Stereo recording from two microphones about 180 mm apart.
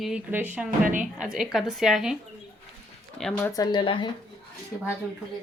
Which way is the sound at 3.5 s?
25° left (ahead or behind).